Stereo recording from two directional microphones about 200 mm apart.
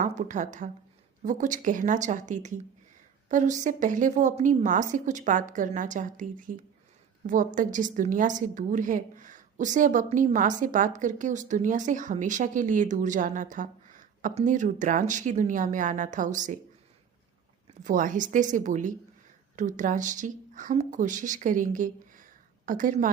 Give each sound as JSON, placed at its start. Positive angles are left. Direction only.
{"t": 0.0, "sound": "a woman's voice", "side_deg": -35}
{"t": 17.8, "sound": "a woman's voice", "side_deg": -40}